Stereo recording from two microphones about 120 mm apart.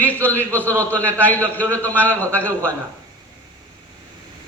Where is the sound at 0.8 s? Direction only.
10° left (ahead or behind).